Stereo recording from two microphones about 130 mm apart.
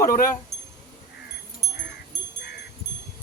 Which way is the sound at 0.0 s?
90° left.